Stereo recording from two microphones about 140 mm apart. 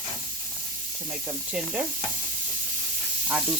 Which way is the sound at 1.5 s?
5° right (ahead or behind).